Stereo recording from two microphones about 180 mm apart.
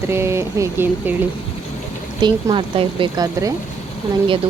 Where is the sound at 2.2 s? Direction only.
25° right (ahead or behind).